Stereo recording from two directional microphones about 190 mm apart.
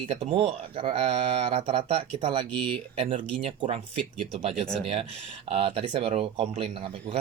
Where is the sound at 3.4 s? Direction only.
30° right (ahead or behind).